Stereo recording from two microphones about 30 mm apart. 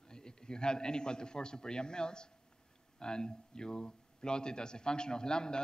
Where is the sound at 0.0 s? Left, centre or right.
Left.